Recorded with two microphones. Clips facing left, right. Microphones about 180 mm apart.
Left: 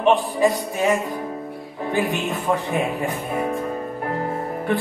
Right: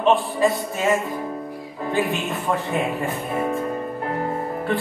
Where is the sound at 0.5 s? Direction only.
Centre (ahead or behind).